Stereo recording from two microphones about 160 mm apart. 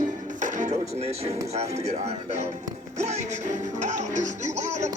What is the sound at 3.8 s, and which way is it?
Music, 50° right (ahead or behind).